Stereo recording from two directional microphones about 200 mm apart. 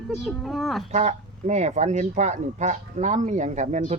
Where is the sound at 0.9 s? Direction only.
35° right (ahead or behind).